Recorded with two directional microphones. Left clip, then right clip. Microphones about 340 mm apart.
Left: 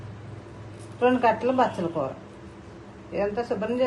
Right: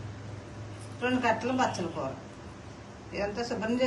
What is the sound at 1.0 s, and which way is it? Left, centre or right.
Speech, centre.